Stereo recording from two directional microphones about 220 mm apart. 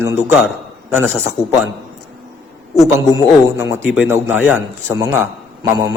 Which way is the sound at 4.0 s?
10° right (ahead or behind).